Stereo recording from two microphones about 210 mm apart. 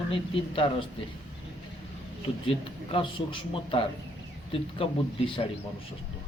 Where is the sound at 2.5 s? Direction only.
25° left (ahead or behind).